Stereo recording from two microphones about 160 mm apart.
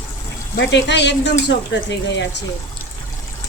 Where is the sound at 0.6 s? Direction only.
90° left.